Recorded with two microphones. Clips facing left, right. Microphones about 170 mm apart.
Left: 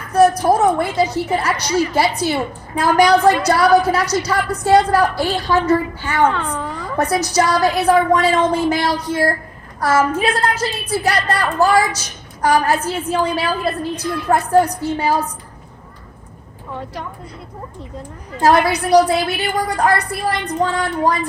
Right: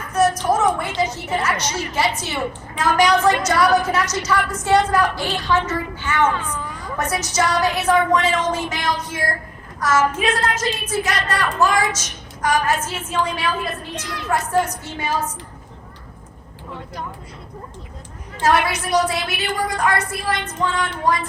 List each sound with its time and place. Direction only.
0.1 s a sound: 35° left (ahead or behind)
1.3 s speech: 35° left (ahead or behind)
6.2 s a woman's voice: 60° left (ahead or behind)
6.9 s speech: 35° left (ahead or behind)
18.3 s speech: 35° left (ahead or behind)